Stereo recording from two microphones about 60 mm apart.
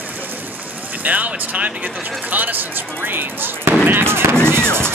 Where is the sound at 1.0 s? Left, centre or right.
Right.